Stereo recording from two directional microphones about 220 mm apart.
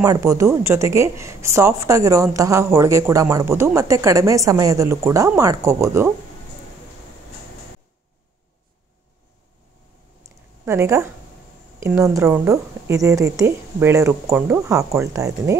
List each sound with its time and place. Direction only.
0.0 s a woman's voice: 15° right (ahead or behind)
10.6 s a woman's voice: 10° right (ahead or behind)